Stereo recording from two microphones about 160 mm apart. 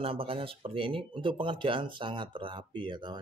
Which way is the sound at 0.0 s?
35° right (ahead or behind).